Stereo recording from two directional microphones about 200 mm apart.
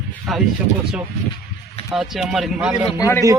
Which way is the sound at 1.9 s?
Centre (ahead or behind).